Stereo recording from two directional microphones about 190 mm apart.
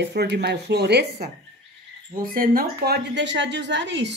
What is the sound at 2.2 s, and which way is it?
Speech, 50° right (ahead or behind).